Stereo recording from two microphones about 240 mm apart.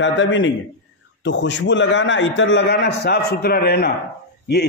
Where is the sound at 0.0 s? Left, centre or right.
Left.